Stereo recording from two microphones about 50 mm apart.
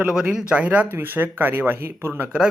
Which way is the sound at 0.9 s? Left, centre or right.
Right.